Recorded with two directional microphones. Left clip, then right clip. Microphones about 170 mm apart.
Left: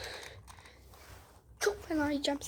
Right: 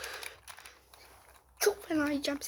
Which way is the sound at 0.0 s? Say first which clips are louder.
Right 2 dB; centre (ahead or behind).